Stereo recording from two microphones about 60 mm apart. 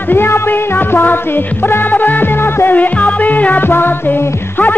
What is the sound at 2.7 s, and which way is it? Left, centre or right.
Music, left.